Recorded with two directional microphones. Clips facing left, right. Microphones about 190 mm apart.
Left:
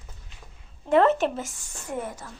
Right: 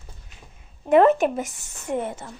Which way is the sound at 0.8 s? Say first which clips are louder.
Right 4 dB; 15° right (ahead or behind).